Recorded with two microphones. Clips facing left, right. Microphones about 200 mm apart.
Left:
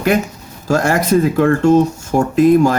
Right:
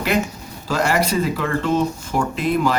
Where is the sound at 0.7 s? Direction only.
45° left (ahead or behind).